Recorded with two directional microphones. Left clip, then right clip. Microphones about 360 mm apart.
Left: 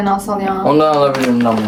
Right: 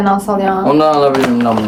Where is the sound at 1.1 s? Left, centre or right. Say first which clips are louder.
Right 2 dB; right.